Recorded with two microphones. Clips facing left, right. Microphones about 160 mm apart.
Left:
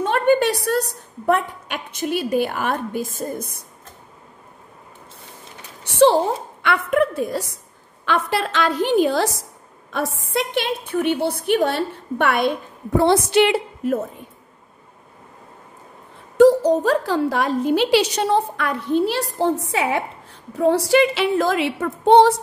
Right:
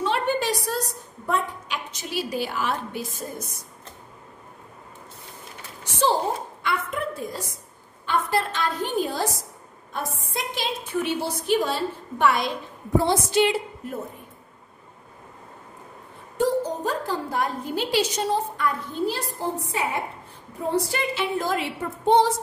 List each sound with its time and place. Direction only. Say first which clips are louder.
0.0 s a woman's voice: left 7 dB; 55° left (ahead or behind)
5.9 s a woman's voice: left 8 dB; 65° left (ahead or behind)
8.0 s a woman's voice: left 3 dB; 85° left
16.3 s a woman's voice: left 11 dB; 85° left; by 22.4 s 70° left (ahead or behind)